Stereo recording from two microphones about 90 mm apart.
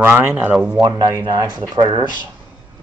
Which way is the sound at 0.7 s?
50° right (ahead or behind).